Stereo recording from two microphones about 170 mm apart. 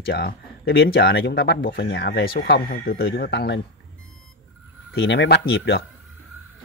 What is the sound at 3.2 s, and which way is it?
Speech, 80° left.